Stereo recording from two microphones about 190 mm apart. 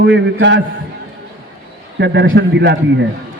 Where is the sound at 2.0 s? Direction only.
70° right (ahead or behind).